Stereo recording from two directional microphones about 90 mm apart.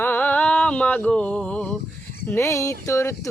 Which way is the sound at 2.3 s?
35° left (ahead or behind).